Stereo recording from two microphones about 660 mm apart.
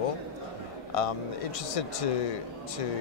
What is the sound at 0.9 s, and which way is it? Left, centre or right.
Speech, left.